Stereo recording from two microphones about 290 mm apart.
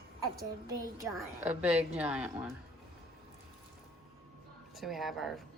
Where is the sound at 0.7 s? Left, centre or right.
Centre.